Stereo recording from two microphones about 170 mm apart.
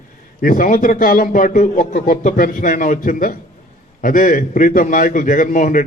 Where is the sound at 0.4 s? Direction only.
55° left (ahead or behind).